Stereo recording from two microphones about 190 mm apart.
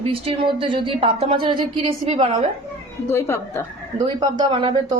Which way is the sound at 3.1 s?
15° left (ahead or behind).